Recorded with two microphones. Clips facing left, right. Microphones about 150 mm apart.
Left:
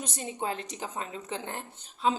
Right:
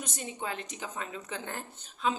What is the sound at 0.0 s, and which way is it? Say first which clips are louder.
A woman's voice: left 4 dB; 30° left (ahead or behind).